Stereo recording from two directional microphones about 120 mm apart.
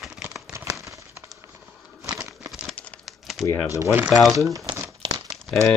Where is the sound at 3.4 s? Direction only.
25° left (ahead or behind).